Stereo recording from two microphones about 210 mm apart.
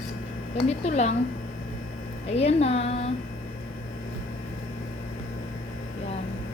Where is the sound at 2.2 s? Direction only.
30° left (ahead or behind).